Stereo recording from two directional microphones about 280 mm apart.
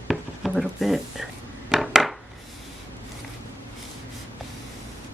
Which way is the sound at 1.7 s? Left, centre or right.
Centre.